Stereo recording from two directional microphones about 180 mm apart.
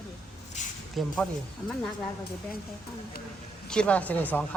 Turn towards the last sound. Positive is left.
turn(degrees=10)  # may be behind; listen again after turning